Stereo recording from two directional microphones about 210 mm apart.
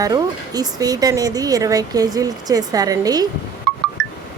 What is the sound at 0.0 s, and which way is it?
Speech, 20° right (ahead or behind).